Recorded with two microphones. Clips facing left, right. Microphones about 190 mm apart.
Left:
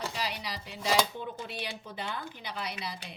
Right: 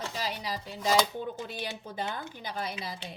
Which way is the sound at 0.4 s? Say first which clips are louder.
Right 4 dB; 45° right (ahead or behind).